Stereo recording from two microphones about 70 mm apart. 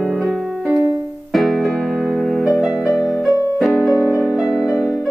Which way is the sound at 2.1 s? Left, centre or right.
Centre.